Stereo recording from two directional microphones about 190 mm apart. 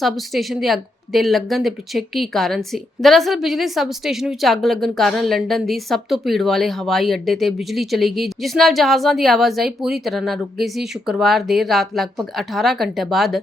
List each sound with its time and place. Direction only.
0.0 s speech: centre (ahead or behind)